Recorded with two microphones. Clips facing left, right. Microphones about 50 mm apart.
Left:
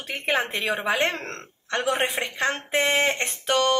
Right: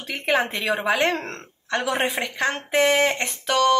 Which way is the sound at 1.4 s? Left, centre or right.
Left.